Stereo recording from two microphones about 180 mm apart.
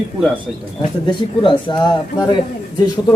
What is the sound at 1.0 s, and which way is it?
Speech, 25° left (ahead or behind).